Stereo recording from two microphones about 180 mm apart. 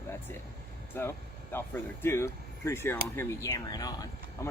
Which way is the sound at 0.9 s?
15° left (ahead or behind).